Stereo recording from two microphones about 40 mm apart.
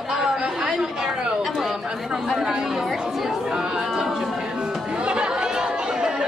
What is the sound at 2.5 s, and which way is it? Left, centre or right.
Speech, centre.